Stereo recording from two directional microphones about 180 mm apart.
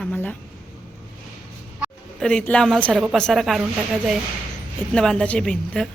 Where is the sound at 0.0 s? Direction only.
5° left (ahead or behind).